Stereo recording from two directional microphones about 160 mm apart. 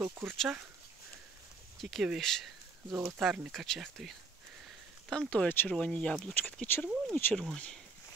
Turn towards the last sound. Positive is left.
turn(degrees=5)  # may be behind; listen again after turning